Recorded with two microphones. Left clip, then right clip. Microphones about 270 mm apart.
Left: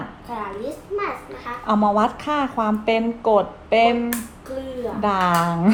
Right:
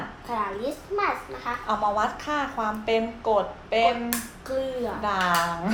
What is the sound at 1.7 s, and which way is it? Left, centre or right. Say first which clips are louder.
Speech: left 6 dB; left.